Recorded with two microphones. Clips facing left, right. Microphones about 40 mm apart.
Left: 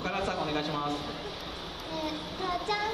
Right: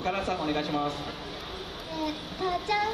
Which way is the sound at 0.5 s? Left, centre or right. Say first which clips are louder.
Right 2 dB; right.